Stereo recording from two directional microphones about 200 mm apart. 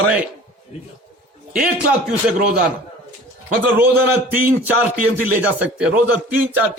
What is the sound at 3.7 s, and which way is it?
Speech, 10° right (ahead or behind).